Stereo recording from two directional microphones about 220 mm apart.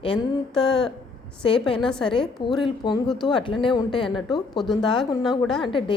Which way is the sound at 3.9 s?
Centre (ahead or behind).